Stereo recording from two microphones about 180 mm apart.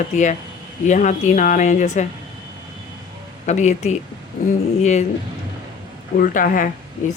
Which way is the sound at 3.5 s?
40° left (ahead or behind).